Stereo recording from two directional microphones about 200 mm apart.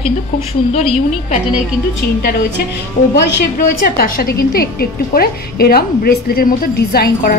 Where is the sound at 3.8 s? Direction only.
50° left (ahead or behind).